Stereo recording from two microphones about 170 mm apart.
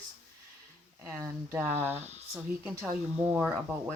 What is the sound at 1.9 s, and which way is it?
Speech, 40° right (ahead or behind).